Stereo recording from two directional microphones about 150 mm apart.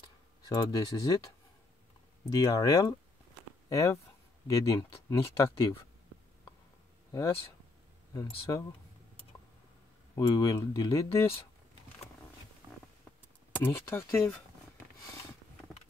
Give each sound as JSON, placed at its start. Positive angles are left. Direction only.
{"t": 0.0, "sound": "a sound", "side_deg": 25}
{"t": 2.3, "sound": "speech", "side_deg": 25}
{"t": 8.1, "sound": "speech", "side_deg": 20}
{"t": 10.1, "sound": "speech", "side_deg": 25}
{"t": 12.6, "sound": "a sound", "side_deg": -25}
{"t": 13.6, "sound": "speech", "side_deg": 15}